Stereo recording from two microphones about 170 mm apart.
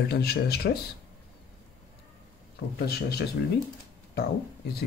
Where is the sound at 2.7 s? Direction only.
70° left (ahead or behind).